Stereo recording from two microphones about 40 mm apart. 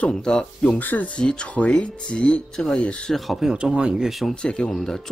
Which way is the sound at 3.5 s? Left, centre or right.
Right.